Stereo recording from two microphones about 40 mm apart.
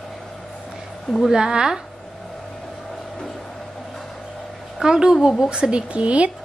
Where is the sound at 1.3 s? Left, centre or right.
Centre.